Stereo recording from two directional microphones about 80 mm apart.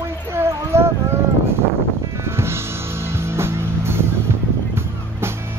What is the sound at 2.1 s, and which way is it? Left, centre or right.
Music, right.